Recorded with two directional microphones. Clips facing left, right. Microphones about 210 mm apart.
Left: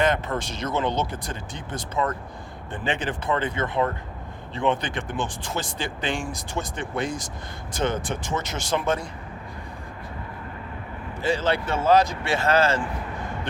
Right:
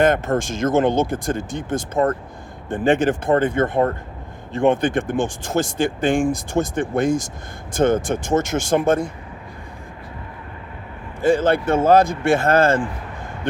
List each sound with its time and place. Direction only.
0.0 s speech: 50° right (ahead or behind)
11.2 s speech: 50° right (ahead or behind)